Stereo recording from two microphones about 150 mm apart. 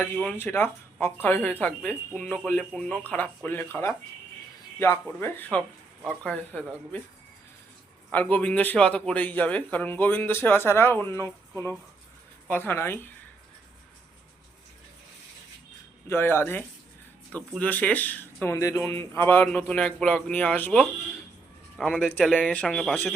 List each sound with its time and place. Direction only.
0.0 s speech: 10° left (ahead or behind)
8.1 s speech: 10° left (ahead or behind)
16.0 s speech: 15° left (ahead or behind)